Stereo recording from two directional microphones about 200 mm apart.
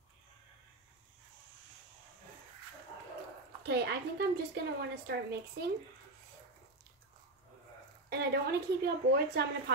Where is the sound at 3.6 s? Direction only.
55° right (ahead or behind).